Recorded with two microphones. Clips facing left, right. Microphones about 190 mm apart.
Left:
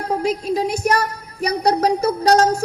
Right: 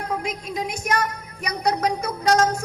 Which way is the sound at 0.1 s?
35° left (ahead or behind).